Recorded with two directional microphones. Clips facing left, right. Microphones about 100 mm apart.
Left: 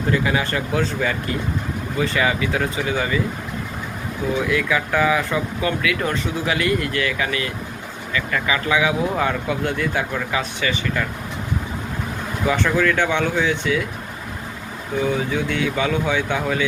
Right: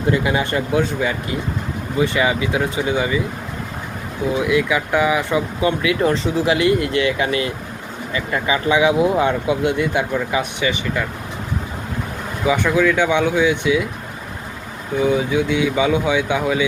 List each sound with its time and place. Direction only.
0.2 s speech: 20° right (ahead or behind)
4.4 s speech: 15° right (ahead or behind)
9.0 s speech: 15° right (ahead or behind)
12.5 s speech: 10° right (ahead or behind)
15.0 s speech: 10° right (ahead or behind)